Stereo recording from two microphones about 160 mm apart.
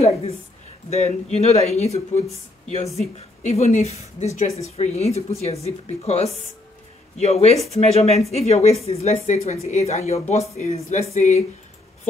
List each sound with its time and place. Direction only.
0.8 s a woman's voice: 45° left (ahead or behind)